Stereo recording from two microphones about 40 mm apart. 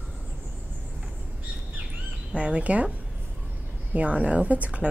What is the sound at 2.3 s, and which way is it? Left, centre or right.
Speech, right.